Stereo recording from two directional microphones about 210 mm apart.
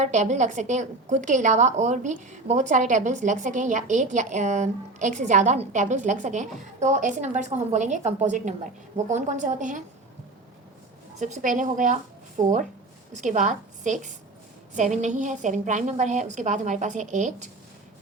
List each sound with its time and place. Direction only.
0.0 s a woman's voice: 35° right (ahead or behind)
11.2 s a woman's voice: 35° right (ahead or behind)